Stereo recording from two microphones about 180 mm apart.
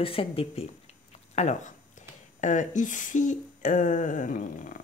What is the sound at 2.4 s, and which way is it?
Speech, 45° left (ahead or behind).